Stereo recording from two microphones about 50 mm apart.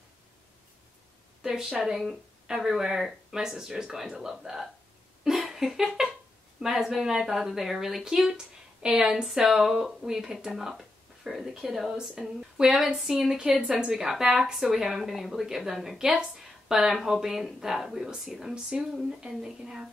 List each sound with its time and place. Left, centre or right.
1.4 s a woman's voice: centre
5.2 s a sound: centre
6.6 s a woman's voice: centre
13.5 s a woman's voice: right